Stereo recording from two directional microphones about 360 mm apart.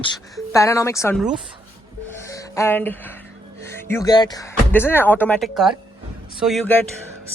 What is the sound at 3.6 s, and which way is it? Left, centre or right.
Speech, centre.